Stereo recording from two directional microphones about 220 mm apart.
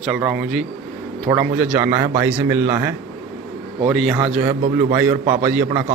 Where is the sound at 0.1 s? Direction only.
5° right (ahead or behind).